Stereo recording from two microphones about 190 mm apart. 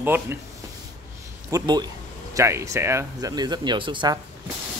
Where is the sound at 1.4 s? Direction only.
20° right (ahead or behind).